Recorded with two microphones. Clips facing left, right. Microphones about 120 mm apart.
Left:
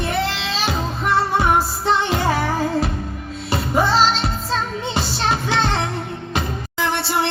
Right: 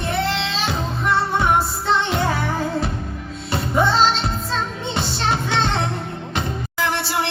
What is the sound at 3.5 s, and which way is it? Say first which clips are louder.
Music: left 1 dB; 10° left (ahead or behind).